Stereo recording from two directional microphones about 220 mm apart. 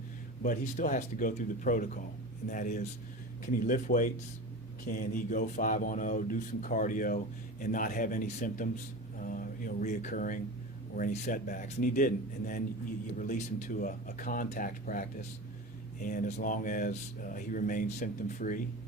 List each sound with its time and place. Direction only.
0.4 s speech: 35° left (ahead or behind)